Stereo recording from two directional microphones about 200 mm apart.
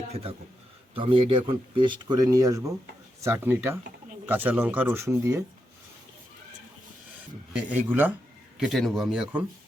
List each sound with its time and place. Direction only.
0.1 s a man's voice: 30° right (ahead or behind); by 5.4 s 15° right (ahead or behind)
7.9 s speech: 10° right (ahead or behind)